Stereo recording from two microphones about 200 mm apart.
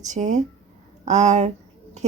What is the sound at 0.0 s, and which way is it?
Speech, 35° right (ahead or behind).